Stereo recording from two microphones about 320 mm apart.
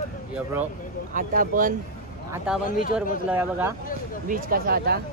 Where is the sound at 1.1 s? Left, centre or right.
Right.